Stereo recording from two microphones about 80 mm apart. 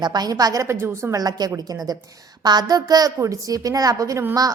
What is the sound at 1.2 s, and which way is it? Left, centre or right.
A woman's voice, right.